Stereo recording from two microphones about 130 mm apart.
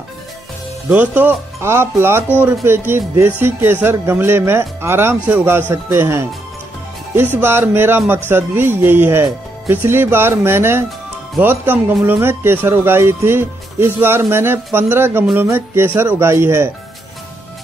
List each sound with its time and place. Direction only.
0.8 s speech: 15° right (ahead or behind)
7.3 s speech: 15° right (ahead or behind)